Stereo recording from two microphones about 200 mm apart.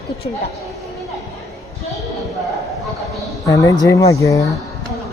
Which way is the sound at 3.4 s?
15° left (ahead or behind).